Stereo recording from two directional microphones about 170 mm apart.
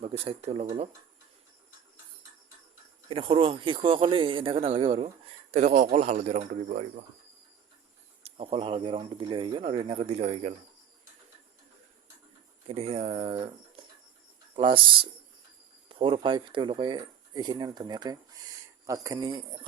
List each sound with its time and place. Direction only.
0.0 s speech: 35° right (ahead or behind)
3.1 s speech: 30° right (ahead or behind); by 6.8 s 50° right (ahead or behind)
8.2 s speech: 35° right (ahead or behind)
12.6 s speech: 35° right (ahead or behind)